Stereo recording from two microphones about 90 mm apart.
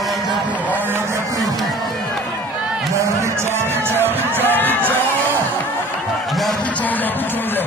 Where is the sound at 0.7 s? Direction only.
25° right (ahead or behind).